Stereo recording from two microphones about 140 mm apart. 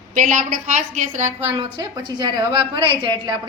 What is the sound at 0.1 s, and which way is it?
A woman's voice, 65° right (ahead or behind).